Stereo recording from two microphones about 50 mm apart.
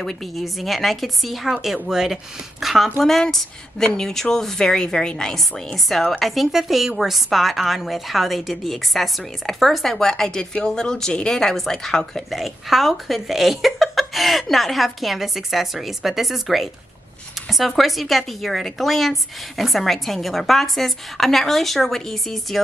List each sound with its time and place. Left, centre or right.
0.0 s a woman's voice: centre
6.1 s a woman's voice: centre
12.3 s speech: centre